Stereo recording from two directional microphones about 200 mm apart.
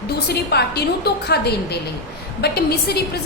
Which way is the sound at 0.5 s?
55° left (ahead or behind).